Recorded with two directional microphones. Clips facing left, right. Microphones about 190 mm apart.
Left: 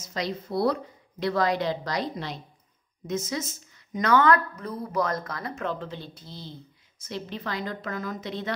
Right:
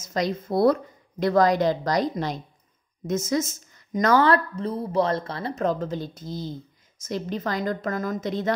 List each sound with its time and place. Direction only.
0.0 s a woman's voice: 45° right (ahead or behind)